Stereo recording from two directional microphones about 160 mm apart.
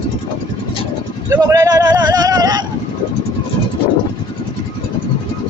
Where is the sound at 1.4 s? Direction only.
20° right (ahead or behind).